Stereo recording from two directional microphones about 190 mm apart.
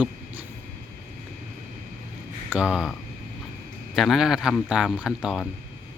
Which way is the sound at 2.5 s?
5° right (ahead or behind).